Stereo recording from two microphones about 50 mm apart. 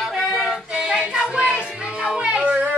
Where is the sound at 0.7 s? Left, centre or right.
Centre.